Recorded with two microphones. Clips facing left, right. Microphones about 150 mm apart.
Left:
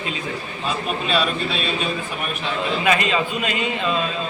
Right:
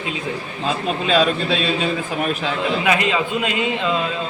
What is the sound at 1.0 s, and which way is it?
Speech, 90° right.